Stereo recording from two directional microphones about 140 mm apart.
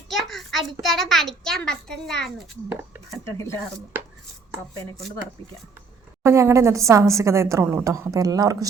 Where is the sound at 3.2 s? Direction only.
20° left (ahead or behind).